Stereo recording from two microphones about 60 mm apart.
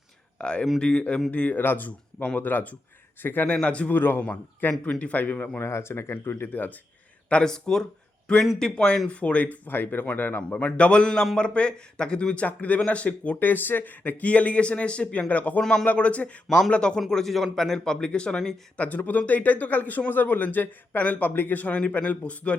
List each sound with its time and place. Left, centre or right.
0.3 s a man's voice: centre; by 3.4 s left
3.4 s a man's voice: centre
3.9 s a man's voice: left
5.5 s speech: left
7.3 s a man's voice: centre
15.6 s speech: centre
15.9 s a man's voice: left
16.5 s speech: centre
18.8 s a man's voice: left